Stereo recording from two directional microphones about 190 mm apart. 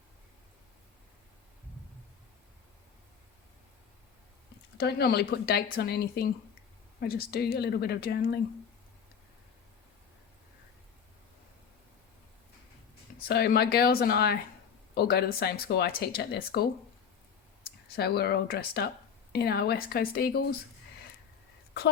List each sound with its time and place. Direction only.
4.8 s speech: 60° left (ahead or behind)
13.2 s speech: 55° left (ahead or behind)
17.9 s speech: 55° left (ahead or behind)